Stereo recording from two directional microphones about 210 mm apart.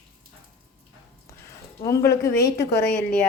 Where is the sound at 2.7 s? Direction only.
50° left (ahead or behind).